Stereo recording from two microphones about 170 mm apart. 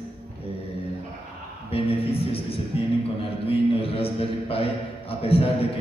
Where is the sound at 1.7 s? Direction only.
35° left (ahead or behind).